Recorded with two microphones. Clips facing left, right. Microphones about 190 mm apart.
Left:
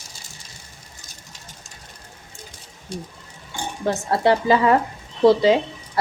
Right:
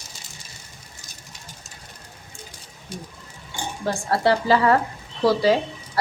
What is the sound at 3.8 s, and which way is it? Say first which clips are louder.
A woman's voice: left 2 dB; 20° left (ahead or behind).